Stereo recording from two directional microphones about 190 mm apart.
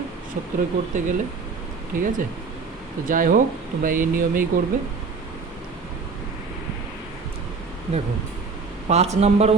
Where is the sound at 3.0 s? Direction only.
45° right (ahead or behind).